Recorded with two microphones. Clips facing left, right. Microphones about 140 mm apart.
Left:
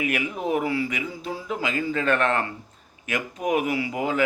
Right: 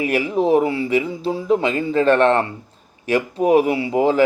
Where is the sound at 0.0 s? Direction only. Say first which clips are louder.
Right 8 dB; 30° right (ahead or behind).